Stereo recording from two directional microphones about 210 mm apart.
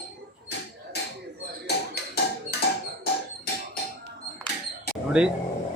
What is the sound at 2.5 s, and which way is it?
Music, 50° left (ahead or behind).